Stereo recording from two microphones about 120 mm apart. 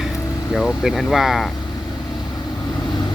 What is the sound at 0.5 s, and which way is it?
Speech, centre (ahead or behind).